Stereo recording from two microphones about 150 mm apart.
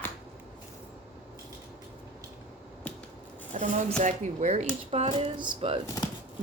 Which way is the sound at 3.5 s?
55° right (ahead or behind).